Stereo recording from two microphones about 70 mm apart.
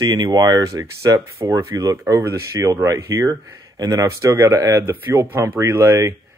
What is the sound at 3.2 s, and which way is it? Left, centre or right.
Speech, right.